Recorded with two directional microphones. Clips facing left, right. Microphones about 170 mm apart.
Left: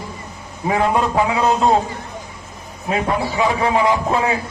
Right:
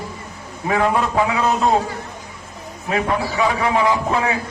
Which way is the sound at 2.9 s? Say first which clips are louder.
Left 1 dB; 25° left (ahead or behind).